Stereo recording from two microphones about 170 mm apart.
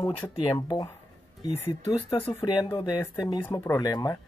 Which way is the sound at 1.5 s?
15° left (ahead or behind).